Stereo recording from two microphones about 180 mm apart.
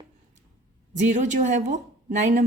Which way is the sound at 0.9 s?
40° right (ahead or behind).